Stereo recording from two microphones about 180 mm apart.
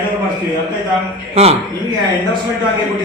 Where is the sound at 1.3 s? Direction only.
35° right (ahead or behind).